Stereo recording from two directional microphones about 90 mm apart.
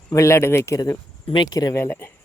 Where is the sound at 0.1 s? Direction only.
35° left (ahead or behind).